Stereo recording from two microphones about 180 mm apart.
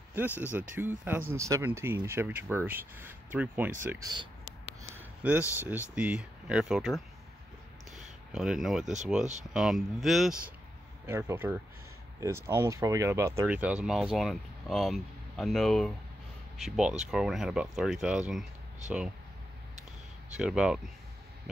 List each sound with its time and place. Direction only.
0.4 s speech: 10° right (ahead or behind)
4.9 s a sound: 10° right (ahead or behind)
5.6 s speech: 10° right (ahead or behind)
8.3 s speech: 5° right (ahead or behind)
9.2 s speech: 40° right (ahead or behind)
9.5 s speech: centre (ahead or behind)
11.1 s speech: 15° right (ahead or behind)
20.3 s speech: 5° right (ahead or behind)